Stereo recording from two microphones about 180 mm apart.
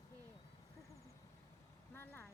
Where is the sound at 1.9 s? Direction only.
10° left (ahead or behind).